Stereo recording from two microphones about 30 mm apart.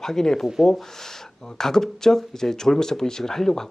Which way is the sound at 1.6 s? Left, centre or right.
Centre.